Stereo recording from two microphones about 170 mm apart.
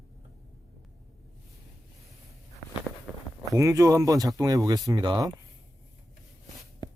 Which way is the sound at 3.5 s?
20° right (ahead or behind).